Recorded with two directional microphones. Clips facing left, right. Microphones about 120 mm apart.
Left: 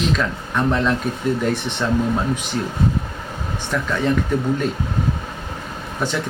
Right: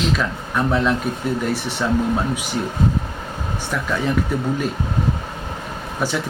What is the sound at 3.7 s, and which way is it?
Speech, 5° right (ahead or behind).